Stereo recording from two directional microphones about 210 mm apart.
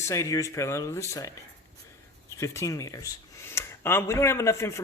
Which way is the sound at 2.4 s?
15° left (ahead or behind).